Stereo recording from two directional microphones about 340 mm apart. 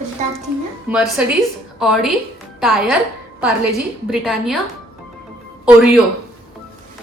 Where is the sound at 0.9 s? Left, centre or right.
Centre.